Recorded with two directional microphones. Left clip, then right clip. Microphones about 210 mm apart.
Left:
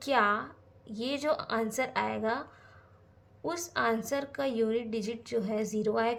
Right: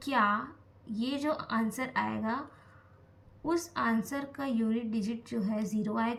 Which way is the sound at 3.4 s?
45° left (ahead or behind).